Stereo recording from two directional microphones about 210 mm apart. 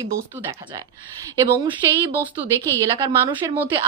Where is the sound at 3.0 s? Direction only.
20° right (ahead or behind).